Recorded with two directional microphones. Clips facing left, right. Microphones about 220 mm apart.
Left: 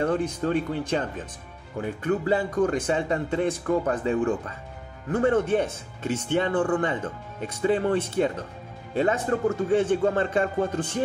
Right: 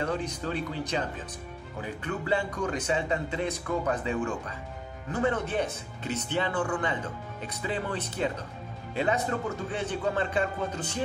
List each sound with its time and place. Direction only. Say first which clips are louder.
0.0 s speech: left 6 dB; 50° left (ahead or behind)